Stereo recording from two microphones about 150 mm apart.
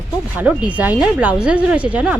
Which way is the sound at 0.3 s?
10° right (ahead or behind).